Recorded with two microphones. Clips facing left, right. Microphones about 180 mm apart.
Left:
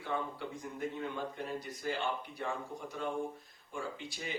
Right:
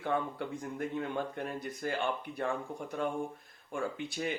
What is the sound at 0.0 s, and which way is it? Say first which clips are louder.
Speech: right 4 dB; 55° right (ahead or behind).